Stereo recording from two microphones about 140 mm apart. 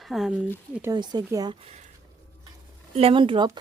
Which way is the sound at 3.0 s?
40° right (ahead or behind).